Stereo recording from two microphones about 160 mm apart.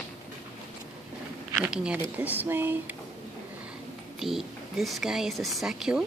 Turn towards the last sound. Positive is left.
turn(degrees=-5)  # may be behind; listen again after turning